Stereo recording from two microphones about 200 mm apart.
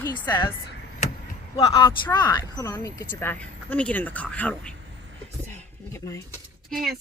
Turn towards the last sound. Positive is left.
turn(degrees=0)  # may be behind; listen again after turning